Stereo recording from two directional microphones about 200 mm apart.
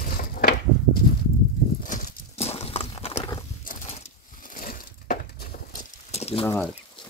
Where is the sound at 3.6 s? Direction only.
40° left (ahead or behind).